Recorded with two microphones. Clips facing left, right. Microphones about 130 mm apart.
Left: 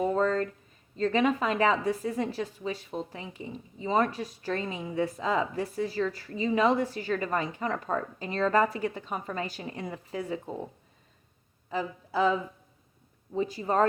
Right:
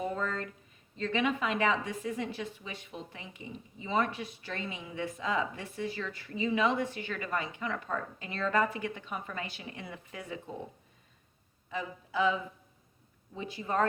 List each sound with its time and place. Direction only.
0.0 s a sound: 35° left (ahead or behind)
0.9 s a woman's voice: 40° left (ahead or behind)
11.7 s a woman's voice: 35° left (ahead or behind)